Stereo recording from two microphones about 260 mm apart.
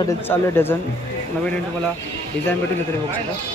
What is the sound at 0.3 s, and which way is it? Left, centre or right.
Speech, centre.